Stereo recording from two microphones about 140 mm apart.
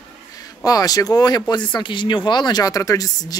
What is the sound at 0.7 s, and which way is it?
Speech, 25° left (ahead or behind).